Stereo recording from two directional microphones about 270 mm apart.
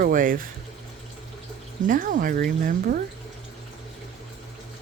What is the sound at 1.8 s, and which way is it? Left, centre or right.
Speech, right.